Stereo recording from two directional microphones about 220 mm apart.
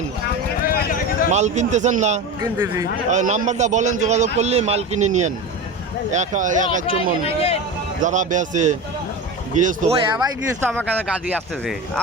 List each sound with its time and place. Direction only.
0.6 s a sound: 40° left (ahead or behind)
1.3 s a man's voice: 30° right (ahead or behind)
2.4 s speech: 15° right (ahead or behind)
3.1 s a man's voice: 35° right (ahead or behind)
7.3 s speech: 25° left (ahead or behind)
8.0 s a man's voice: 35° right (ahead or behind)
10.2 s speech: 15° right (ahead or behind)
10.7 s speech: 5° left (ahead or behind)